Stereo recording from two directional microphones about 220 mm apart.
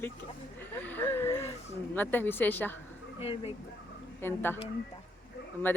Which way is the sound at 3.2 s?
25° left (ahead or behind).